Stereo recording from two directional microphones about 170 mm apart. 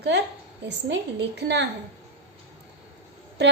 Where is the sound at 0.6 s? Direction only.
90° right.